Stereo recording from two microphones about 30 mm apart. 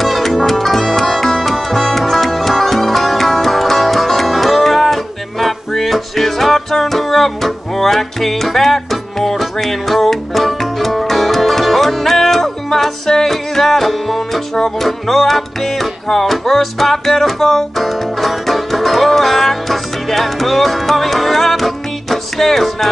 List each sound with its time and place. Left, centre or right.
0.0 s music: centre